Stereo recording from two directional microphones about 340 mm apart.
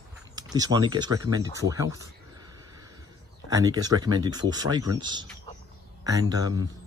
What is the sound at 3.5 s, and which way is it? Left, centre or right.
A man's voice, centre.